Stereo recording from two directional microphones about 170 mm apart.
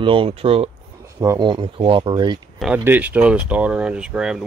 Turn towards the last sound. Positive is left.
turn(degrees=-5)  # may be behind; listen again after turning